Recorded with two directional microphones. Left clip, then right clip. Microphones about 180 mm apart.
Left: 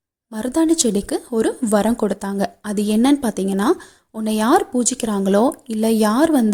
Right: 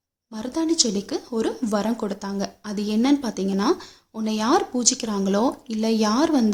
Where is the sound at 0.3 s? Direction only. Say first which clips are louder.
Left 5 dB; 35° left (ahead or behind).